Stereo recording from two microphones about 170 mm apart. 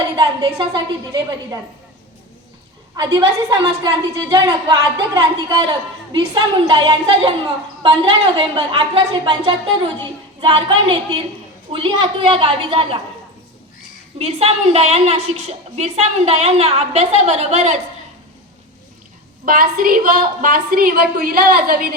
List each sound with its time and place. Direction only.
0.2 s a woman's voice: 25° right (ahead or behind)
2.9 s a woman's voice: 25° right (ahead or behind)
4.3 s a woman's voice: 25° right (ahead or behind)
14.2 s a woman's voice: 35° right (ahead or behind)
19.5 s a woman's voice: 60° right (ahead or behind)